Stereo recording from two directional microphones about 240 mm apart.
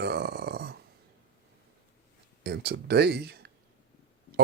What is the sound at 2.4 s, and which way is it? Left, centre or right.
Speech, right.